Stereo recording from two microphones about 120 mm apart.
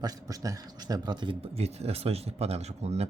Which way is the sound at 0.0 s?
30° right (ahead or behind).